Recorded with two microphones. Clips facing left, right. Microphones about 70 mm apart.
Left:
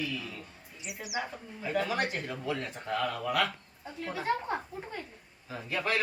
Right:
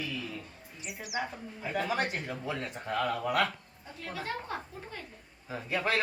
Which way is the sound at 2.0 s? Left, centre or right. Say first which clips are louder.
Left 1 dB; centre.